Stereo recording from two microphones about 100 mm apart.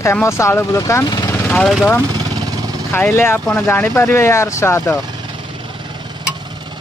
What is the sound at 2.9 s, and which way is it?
Speech, 20° left (ahead or behind).